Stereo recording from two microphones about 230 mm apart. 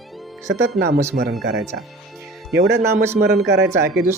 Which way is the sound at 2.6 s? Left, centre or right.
Right.